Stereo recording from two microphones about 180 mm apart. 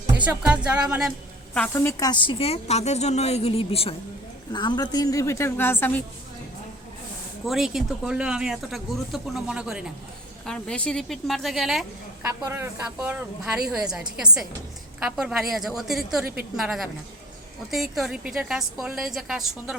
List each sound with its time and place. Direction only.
0.3 s speech: 5° right (ahead or behind)
1.5 s a woman's voice: 10° left (ahead or behind)
7.4 s speech: centre (ahead or behind)